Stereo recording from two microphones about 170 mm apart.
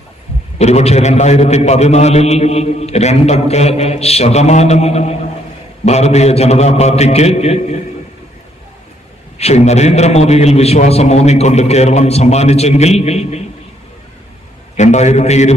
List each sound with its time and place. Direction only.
0.6 s a man's voice: 40° left (ahead or behind)
9.4 s a man's voice: 40° left (ahead or behind)
14.8 s a man's voice: 40° left (ahead or behind)